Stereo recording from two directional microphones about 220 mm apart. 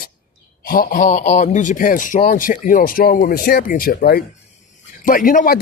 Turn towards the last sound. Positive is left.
turn(degrees=40)  # may be behind; listen again after turning